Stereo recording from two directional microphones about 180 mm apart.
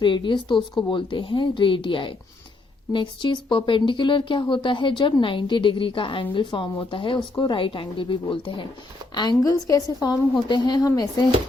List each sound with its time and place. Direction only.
0.0 s speech: 25° left (ahead or behind)